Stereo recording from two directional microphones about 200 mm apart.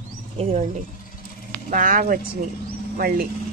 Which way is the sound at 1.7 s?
40° right (ahead or behind).